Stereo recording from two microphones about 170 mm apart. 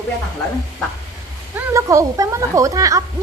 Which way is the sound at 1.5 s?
15° right (ahead or behind).